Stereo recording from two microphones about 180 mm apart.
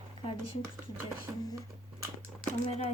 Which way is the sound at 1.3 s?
20° right (ahead or behind).